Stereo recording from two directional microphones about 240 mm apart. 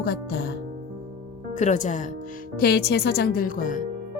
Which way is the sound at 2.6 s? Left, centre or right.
Left.